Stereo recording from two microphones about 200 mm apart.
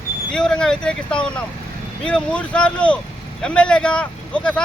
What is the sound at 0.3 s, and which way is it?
Speech, 5° left (ahead or behind).